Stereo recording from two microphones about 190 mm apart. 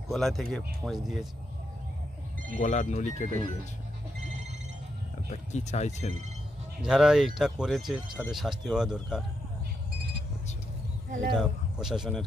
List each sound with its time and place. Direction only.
0.1 s speech: centre (ahead or behind)
2.6 s speech: 35° left (ahead or behind)
5.3 s speech: 35° left (ahead or behind)
6.8 s speech: 5° right (ahead or behind)
11.3 s speech: 5° right (ahead or behind)